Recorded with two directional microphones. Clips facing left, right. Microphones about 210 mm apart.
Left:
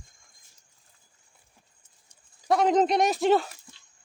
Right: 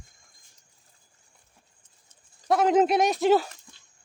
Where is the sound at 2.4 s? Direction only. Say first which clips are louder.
Right 1 dB; centre (ahead or behind).